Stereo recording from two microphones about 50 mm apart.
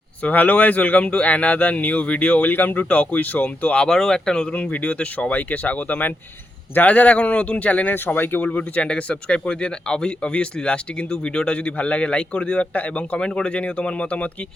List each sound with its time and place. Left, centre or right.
0.2 s speech: left
3.8 s speech: centre
4.5 s speech: left
7.9 s speech: left
8.4 s speech: left